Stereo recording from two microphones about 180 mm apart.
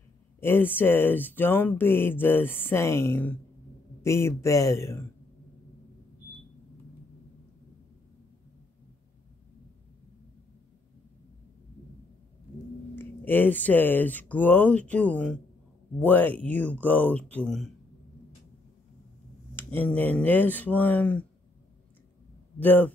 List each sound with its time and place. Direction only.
0.4 s speech: 10° left (ahead or behind)
12.9 s speech: 10° left (ahead or behind)
19.5 s speech: 10° left (ahead or behind)
22.6 s speech: 10° left (ahead or behind)